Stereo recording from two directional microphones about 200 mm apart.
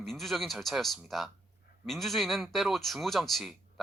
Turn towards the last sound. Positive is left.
turn(degrees=0)  # may be behind; listen again after turning